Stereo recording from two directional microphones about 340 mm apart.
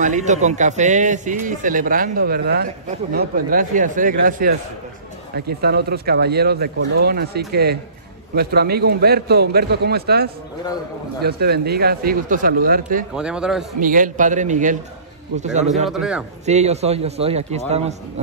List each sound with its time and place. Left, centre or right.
0.0 s a man's voice: right
13.1 s a man's voice: centre
13.7 s a man's voice: right
15.9 s a man's voice: centre
16.4 s a man's voice: centre